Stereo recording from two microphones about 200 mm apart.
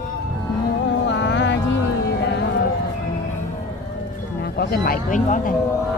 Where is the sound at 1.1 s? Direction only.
60° left (ahead or behind).